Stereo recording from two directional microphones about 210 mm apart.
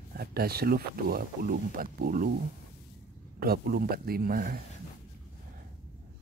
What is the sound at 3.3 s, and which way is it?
Speech, 45° right (ahead or behind).